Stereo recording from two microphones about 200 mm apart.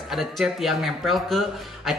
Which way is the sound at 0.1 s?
Centre (ahead or behind).